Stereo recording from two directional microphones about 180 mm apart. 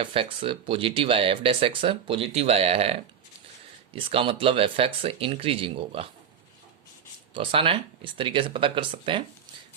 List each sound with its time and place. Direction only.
0.0 s speech: 30° right (ahead or behind)
7.3 s speech: 30° right (ahead or behind)